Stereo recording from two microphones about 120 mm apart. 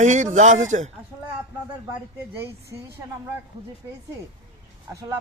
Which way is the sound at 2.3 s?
20° right (ahead or behind).